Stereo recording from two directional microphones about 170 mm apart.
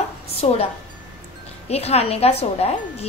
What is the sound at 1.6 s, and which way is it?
A woman's voice, 35° left (ahead or behind).